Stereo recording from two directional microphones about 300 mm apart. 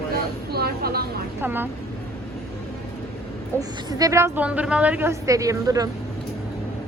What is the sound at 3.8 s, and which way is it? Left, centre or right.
A woman's voice, centre.